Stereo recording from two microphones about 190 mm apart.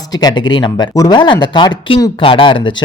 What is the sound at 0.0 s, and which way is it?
Speech, 20° left (ahead or behind).